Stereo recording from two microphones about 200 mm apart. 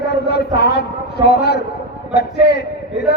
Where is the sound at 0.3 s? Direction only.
55° left (ahead or behind).